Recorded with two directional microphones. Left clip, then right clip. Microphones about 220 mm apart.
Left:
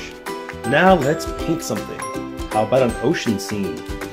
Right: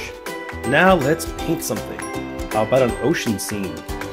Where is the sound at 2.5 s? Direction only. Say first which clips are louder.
Even; 20° right (ahead or behind).